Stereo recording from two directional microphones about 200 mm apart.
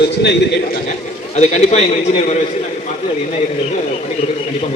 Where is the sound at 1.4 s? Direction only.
35° left (ahead or behind).